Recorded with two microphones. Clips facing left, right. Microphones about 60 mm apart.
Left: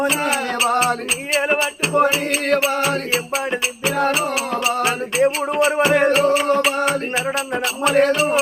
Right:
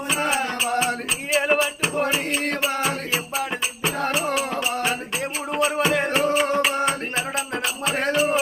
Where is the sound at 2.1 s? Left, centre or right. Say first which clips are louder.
Left 5 dB; left.